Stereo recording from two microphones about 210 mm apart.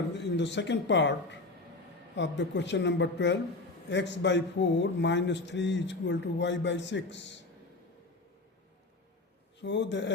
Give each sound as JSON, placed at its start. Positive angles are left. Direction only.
{"t": 0.2, "sound": "a man's voice", "side_deg": 55}
{"t": 9.6, "sound": "a man's voice", "side_deg": 55}